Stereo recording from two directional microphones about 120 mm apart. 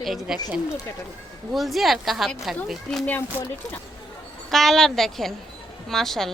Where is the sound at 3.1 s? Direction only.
20° left (ahead or behind).